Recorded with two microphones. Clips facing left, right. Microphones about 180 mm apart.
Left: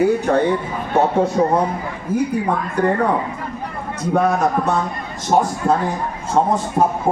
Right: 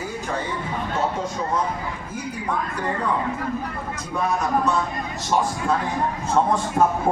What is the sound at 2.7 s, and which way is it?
Speech, 60° left (ahead or behind).